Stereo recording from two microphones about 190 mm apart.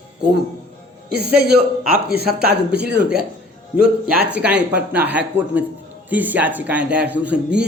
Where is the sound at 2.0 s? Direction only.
55° right (ahead or behind).